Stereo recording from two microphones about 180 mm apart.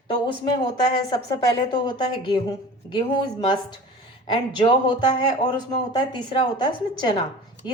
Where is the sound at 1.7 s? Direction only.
25° left (ahead or behind).